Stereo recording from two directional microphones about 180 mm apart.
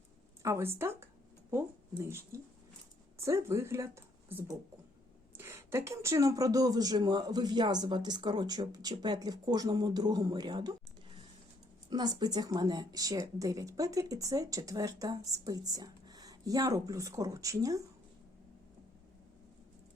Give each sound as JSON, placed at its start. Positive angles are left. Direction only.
{"t": 0.4, "sound": "a woman's voice", "side_deg": -15}
{"t": 11.9, "sound": "a woman's voice", "side_deg": -25}